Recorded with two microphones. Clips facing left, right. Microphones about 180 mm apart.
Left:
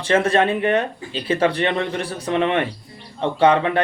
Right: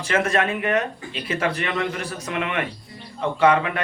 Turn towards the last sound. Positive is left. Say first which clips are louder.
# left 3 dB
turn(degrees=30)  # may be behind; listen again after turning